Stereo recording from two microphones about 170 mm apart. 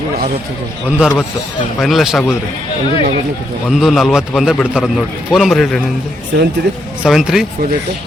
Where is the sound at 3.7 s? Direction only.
Centre (ahead or behind).